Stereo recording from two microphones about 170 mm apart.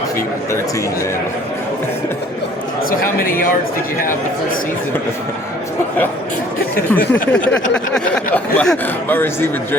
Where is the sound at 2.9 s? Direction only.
55° left (ahead or behind).